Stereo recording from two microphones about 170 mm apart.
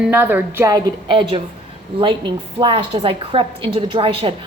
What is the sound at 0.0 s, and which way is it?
A woman's voice, 10° right (ahead or behind).